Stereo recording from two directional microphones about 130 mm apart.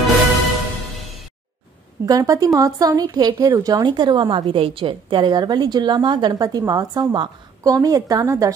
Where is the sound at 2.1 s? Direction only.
25° right (ahead or behind).